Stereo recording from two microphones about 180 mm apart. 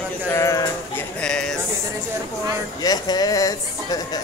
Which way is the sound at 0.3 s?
15° left (ahead or behind).